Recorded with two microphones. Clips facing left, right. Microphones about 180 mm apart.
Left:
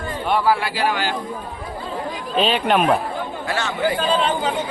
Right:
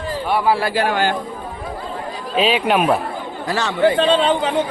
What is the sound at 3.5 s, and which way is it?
Speech, 35° right (ahead or behind).